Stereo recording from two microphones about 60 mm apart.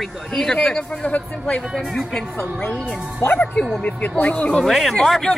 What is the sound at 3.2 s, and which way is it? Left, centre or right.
Speech, left.